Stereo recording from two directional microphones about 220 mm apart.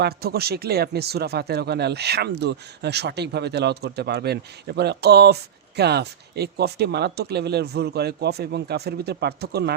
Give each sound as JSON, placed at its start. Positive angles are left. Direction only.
{"t": 0.0, "sound": "speech", "side_deg": -45}